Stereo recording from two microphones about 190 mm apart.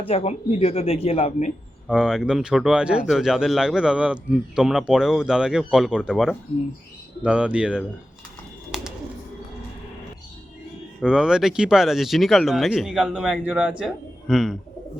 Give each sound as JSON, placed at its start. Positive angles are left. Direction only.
{"t": 0.0, "sound": "speech", "side_deg": 30}
{"t": 1.9, "sound": "speech", "side_deg": -5}
{"t": 8.7, "sound": "bird", "side_deg": -5}
{"t": 11.0, "sound": "speech", "side_deg": -5}